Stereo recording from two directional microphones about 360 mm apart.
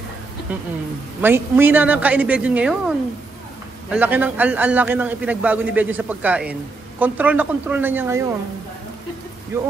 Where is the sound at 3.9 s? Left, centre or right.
Centre.